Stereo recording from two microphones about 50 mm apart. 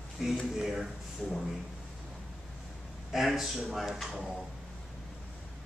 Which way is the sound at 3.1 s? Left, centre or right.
Centre.